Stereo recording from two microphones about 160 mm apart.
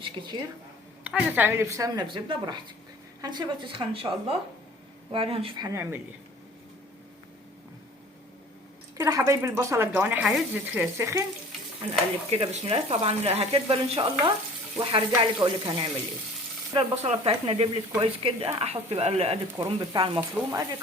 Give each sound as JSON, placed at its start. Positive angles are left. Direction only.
{"t": 0.0, "sound": "speech", "side_deg": -30}
{"t": 1.0, "sound": "speech", "side_deg": -15}
{"t": 5.6, "sound": "speech", "side_deg": -15}
{"t": 9.0, "sound": "speech", "side_deg": -20}
{"t": 12.3, "sound": "speech", "side_deg": -40}
{"t": 16.9, "sound": "speech", "side_deg": -40}
{"t": 19.5, "sound": "speech", "side_deg": -30}
{"t": 20.3, "sound": "speech", "side_deg": -20}